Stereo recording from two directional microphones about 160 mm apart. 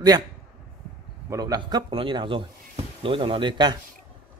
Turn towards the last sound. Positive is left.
turn(degrees=-30)  # may be behind; listen again after turning